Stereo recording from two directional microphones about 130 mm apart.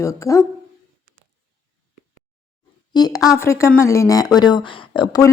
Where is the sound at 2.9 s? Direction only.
30° left (ahead or behind).